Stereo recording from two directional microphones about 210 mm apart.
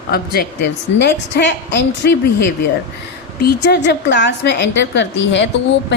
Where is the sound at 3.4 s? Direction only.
50° left (ahead or behind).